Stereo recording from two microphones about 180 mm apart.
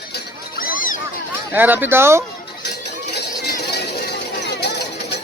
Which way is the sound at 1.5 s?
10° right (ahead or behind).